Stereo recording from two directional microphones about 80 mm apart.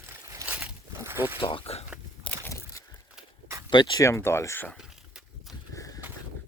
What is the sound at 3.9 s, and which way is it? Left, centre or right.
Speech, left.